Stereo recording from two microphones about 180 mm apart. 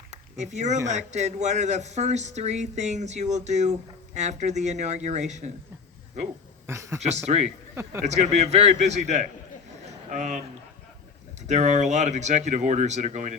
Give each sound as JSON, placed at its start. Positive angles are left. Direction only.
{"t": 0.1, "sound": "a sound", "side_deg": -40}
{"t": 0.9, "sound": "speech", "side_deg": -40}
{"t": 6.7, "sound": "speech", "side_deg": -15}
{"t": 7.0, "sound": "speech", "side_deg": -40}
{"t": 11.4, "sound": "speech", "side_deg": -40}